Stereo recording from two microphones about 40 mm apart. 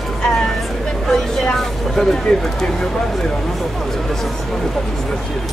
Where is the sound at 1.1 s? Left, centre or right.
Centre.